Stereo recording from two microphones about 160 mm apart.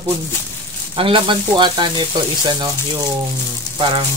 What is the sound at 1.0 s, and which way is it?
Sizzle, 30° right (ahead or behind).